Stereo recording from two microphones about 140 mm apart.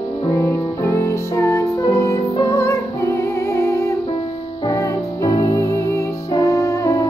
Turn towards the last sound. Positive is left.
turn(degrees=20)  # may be behind; listen again after turning